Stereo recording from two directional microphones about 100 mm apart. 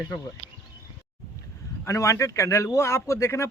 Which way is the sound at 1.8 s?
30° left (ahead or behind).